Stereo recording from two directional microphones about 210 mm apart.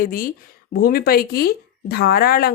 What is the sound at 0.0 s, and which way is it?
Speech, 40° left (ahead or behind).